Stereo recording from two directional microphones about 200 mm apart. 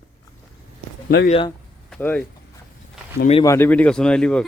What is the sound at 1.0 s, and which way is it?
Speech, 55° left (ahead or behind).